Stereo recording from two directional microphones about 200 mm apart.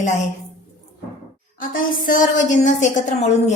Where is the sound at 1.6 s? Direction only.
40° left (ahead or behind).